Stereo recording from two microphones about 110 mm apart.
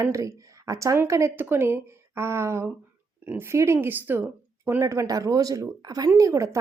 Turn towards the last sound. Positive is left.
turn(degrees=-25)  # may be behind; listen again after turning